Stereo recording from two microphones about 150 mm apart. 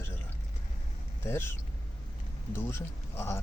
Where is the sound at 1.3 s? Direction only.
15° left (ahead or behind).